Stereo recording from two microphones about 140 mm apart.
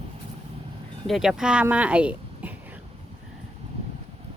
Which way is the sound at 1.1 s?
5° right (ahead or behind).